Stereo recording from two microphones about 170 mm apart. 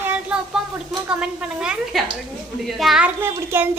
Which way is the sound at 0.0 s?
5° right (ahead or behind).